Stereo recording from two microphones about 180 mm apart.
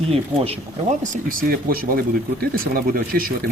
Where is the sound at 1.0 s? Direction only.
45° right (ahead or behind).